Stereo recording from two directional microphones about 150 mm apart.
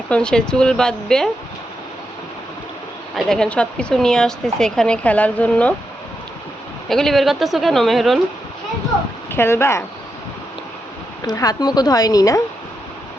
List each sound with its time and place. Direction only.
0.1 s a woman's voice: 5° left (ahead or behind)
3.2 s a woman's voice: 5° left (ahead or behind)
6.8 s a woman's voice: centre (ahead or behind)
9.3 s speech: 15° left (ahead or behind)
11.3 s a woman's voice: 25° left (ahead or behind)